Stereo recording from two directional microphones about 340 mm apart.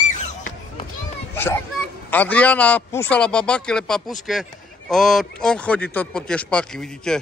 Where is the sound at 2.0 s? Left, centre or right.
Centre.